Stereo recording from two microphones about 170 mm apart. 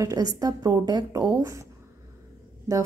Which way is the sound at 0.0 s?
20° right (ahead or behind).